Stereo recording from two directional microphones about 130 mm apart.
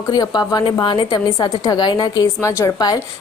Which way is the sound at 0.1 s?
30° left (ahead or behind).